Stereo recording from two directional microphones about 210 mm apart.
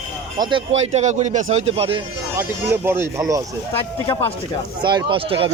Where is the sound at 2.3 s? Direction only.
10° right (ahead or behind).